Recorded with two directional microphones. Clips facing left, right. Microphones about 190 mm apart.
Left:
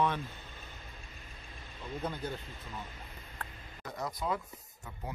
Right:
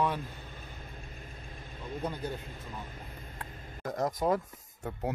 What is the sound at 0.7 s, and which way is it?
Vehicle, 50° right (ahead or behind).